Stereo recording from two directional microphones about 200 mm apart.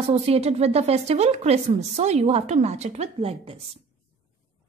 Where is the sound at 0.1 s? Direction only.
30° right (ahead or behind).